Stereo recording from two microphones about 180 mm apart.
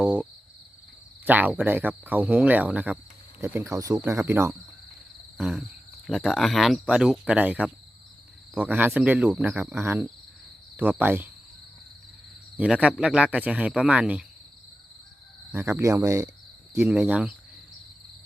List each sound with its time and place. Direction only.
0.0 s a sound: 5° right (ahead or behind)
1.2 s speech: 10° right (ahead or behind)
5.4 s wild animals: centre (ahead or behind)
6.1 s speech: centre (ahead or behind)
12.5 s speech: 5° right (ahead or behind)
15.5 s speech: 15° right (ahead or behind)